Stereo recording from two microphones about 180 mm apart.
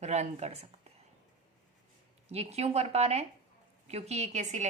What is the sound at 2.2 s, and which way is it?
A woman's voice, 35° right (ahead or behind).